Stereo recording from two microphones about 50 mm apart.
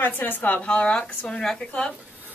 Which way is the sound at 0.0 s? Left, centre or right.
Left.